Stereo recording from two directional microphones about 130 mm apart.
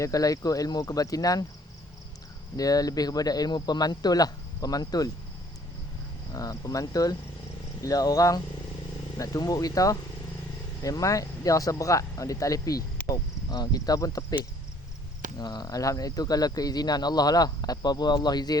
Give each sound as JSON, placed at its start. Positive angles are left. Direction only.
{"t": 0.0, "sound": "speech", "side_deg": 25}
{"t": 2.6, "sound": "speech", "side_deg": 30}
{"t": 6.3, "sound": "speech", "side_deg": 25}
{"t": 15.4, "sound": "speech", "side_deg": 30}